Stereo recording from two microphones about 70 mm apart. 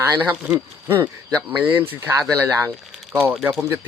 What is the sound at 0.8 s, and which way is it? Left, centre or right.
Speech, right.